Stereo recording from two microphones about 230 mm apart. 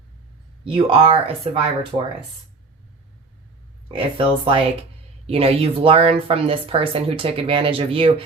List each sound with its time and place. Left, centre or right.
0.7 s speech: right
3.9 s speech: right